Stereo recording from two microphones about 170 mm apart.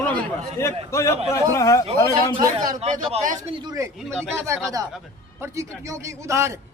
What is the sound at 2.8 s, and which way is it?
Speech, 40° right (ahead or behind).